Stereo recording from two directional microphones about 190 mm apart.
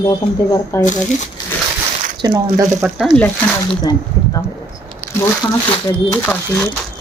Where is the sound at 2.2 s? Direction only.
25° right (ahead or behind).